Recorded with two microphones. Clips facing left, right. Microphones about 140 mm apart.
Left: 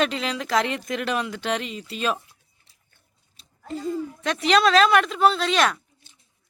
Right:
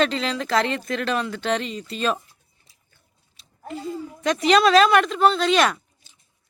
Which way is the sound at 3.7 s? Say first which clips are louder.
Left 2 dB; 40° left (ahead or behind).